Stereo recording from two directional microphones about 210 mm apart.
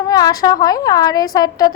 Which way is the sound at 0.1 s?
20° left (ahead or behind).